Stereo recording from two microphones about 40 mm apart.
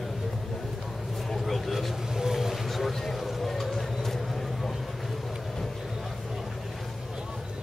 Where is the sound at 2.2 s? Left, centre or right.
Centre.